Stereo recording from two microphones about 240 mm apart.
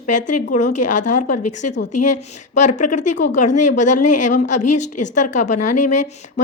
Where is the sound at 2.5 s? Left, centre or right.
Left.